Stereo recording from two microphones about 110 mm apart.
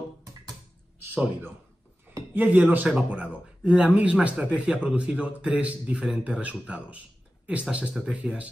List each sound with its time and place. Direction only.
1.1 s a man's voice: 15° right (ahead or behind)